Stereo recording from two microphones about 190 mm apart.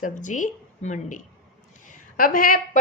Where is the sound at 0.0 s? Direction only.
40° left (ahead or behind).